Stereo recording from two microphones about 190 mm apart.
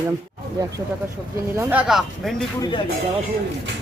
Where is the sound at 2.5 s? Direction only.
20° left (ahead or behind).